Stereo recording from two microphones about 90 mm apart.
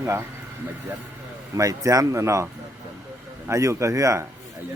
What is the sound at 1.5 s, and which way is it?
A man's voice, 35° right (ahead or behind).